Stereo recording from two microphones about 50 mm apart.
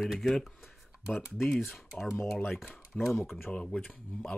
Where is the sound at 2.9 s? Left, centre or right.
Left.